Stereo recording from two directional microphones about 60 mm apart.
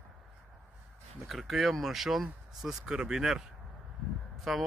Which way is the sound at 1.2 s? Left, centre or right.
Centre.